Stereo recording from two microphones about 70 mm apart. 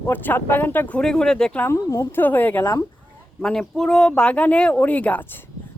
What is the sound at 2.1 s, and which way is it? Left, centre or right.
Speech, left.